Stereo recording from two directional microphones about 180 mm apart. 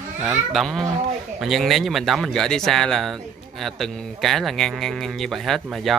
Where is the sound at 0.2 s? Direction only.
Centre (ahead or behind).